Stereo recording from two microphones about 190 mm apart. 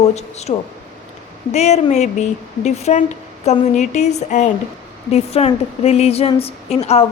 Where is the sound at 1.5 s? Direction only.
35° left (ahead or behind).